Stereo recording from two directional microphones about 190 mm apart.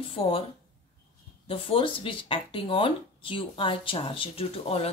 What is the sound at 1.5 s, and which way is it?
A woman's voice, 30° left (ahead or behind).